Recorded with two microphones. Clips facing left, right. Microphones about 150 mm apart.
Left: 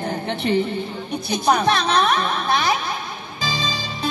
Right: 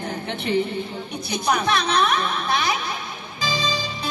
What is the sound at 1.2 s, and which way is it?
A woman's voice, 25° left (ahead or behind).